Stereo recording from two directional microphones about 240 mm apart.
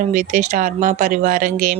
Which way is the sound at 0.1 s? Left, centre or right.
Right.